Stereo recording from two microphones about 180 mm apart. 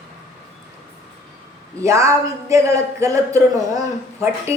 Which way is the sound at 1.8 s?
15° right (ahead or behind).